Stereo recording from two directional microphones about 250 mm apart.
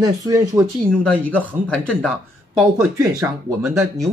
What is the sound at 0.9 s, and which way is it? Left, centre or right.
Speech, centre.